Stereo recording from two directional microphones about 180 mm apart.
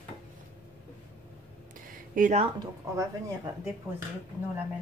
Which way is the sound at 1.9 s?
45° right (ahead or behind).